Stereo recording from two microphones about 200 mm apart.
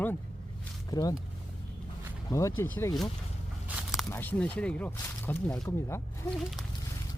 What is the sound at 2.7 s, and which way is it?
Speech, 15° left (ahead or behind).